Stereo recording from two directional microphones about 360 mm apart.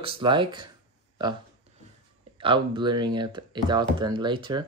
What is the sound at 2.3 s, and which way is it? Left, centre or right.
Speech, centre.